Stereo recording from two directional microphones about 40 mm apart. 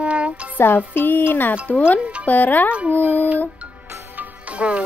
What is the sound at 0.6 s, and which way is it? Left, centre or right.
Music, left.